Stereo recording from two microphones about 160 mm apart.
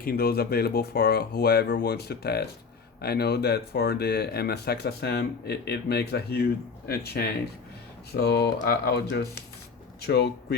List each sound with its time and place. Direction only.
0.0 s speech: 70° left (ahead or behind); by 10.6 s 90° left